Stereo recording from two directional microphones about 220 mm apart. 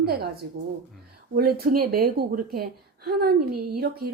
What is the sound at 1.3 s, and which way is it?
A woman's voice, 40° right (ahead or behind).